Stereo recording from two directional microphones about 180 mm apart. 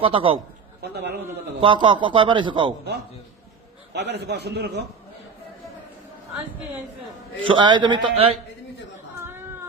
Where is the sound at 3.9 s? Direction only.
70° right (ahead or behind).